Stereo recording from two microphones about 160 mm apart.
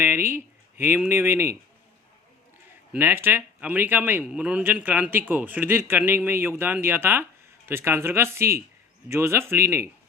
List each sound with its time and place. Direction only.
0.0 s a man's voice: 15° right (ahead or behind)
2.9 s a man's voice: 10° right (ahead or behind)